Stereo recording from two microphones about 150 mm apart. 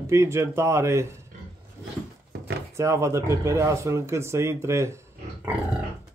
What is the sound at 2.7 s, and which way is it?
Speech, 20° right (ahead or behind).